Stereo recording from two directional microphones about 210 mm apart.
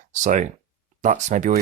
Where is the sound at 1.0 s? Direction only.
35° right (ahead or behind).